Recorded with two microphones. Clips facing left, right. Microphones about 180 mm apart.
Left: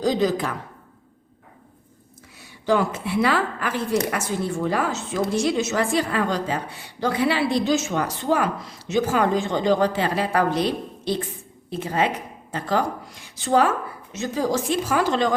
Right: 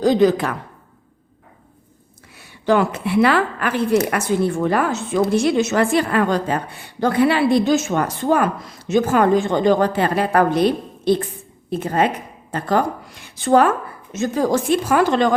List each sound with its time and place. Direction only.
0.0 s a woman's voice: 60° right (ahead or behind)
2.3 s a woman's voice: 65° right (ahead or behind)